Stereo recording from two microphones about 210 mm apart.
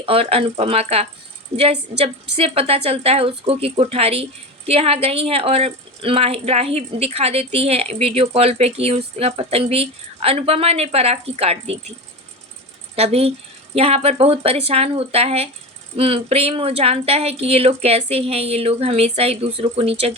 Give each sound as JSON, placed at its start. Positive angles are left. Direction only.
{"t": 0.0, "sound": "speech", "side_deg": -25}
{"t": 13.0, "sound": "speech", "side_deg": -30}